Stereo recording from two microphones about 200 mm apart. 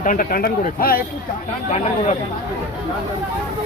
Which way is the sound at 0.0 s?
45° left (ahead or behind).